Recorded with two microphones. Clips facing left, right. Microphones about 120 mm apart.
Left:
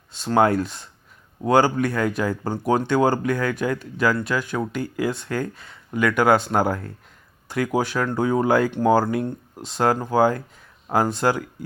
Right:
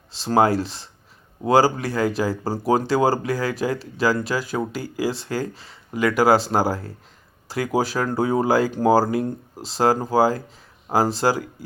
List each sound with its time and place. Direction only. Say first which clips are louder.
0.1 s speech: even; 30° right (ahead or behind)
7.4 s a sound: left 1 dB; 35° right (ahead or behind)
7.8 s speech: right 2 dB; 35° right (ahead or behind)